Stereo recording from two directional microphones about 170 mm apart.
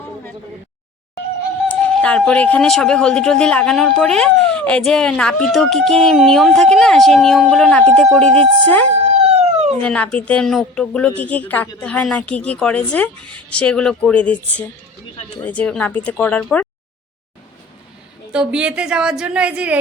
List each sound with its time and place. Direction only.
1.6 s speech: 5° left (ahead or behind)
9.2 s a sound: 40° right (ahead or behind)
9.8 s speech: 5° left (ahead or behind)
18.3 s speech: 5° right (ahead or behind)